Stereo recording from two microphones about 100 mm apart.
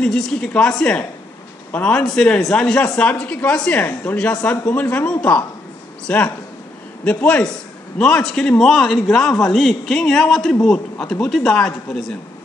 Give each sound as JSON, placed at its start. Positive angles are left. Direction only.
{"t": 0.0, "sound": "a man's voice", "side_deg": 5}